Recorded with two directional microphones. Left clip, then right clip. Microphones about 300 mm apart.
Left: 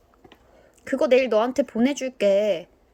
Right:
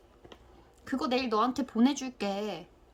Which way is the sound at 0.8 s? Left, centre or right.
Centre.